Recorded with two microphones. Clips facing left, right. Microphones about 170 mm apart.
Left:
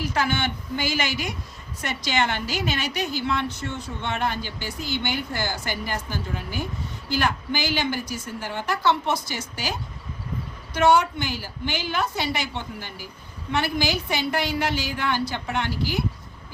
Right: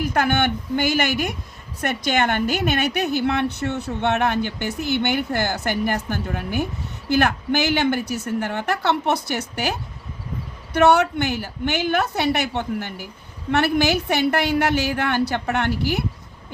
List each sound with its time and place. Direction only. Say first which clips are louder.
0.0 s a woman's voice: right 5 dB; 55° right (ahead or behind)
10.8 s a woman's voice: right 3 dB; 65° right (ahead or behind)